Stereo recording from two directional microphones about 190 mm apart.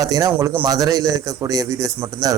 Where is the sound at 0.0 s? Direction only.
20° right (ahead or behind).